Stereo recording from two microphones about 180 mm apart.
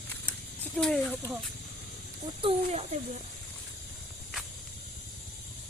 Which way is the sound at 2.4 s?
35° right (ahead or behind).